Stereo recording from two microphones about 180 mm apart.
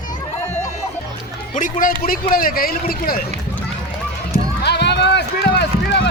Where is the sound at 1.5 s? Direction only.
45° left (ahead or behind).